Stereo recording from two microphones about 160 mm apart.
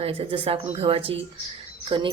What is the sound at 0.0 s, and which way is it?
A woman's voice, 35° right (ahead or behind).